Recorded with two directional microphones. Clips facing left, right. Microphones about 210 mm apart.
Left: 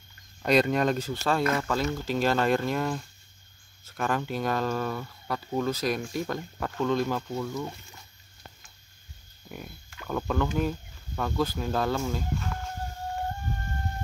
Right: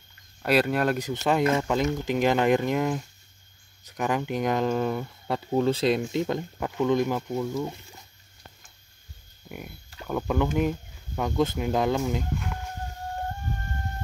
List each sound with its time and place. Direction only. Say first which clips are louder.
0.4 s speech: even; 5° right (ahead or behind)
10.0 s speech: right 2 dB; 10° right (ahead or behind)